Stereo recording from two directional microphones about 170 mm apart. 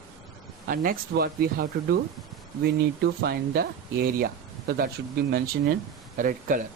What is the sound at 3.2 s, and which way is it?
Speech, 65° right (ahead or behind).